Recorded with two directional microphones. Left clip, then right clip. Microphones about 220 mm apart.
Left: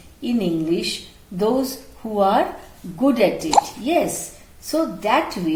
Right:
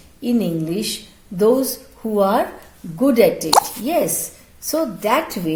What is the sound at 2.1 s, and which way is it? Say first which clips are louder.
A woman's voice: even; 45° right (ahead or behind).